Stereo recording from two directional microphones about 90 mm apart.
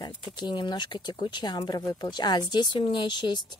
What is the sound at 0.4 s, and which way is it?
Speech, 55° left (ahead or behind).